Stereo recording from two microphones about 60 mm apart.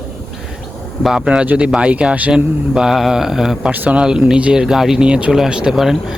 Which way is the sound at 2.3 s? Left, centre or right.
Centre.